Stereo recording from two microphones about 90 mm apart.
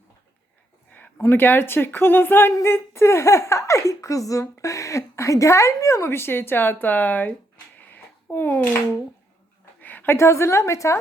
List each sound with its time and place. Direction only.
1.2 s speech: 25° left (ahead or behind)
2.5 s speech: 35° left (ahead or behind)
7.8 s a sound: 20° left (ahead or behind)
9.8 s a woman's voice: 20° left (ahead or behind)